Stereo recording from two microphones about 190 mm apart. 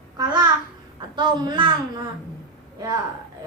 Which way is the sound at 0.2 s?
20° right (ahead or behind).